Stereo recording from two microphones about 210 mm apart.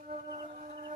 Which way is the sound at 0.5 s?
35° right (ahead or behind).